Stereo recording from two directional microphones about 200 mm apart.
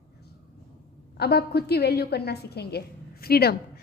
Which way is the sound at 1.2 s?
55° left (ahead or behind).